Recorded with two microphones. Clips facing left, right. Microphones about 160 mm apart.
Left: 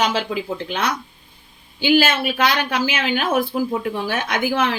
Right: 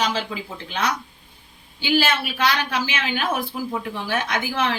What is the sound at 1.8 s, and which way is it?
Speech, 50° left (ahead or behind).